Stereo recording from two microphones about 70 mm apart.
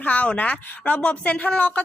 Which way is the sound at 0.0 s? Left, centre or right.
Left.